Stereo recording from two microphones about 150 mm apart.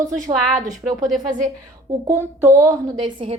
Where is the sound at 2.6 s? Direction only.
25° right (ahead or behind).